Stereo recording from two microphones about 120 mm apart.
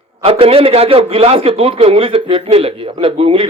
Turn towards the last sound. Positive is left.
turn(degrees=-50)  # may be behind; listen again after turning